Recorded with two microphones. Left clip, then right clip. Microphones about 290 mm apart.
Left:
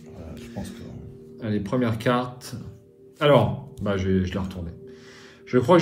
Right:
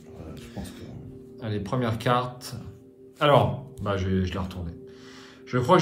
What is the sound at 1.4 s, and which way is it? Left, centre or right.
Speech, centre.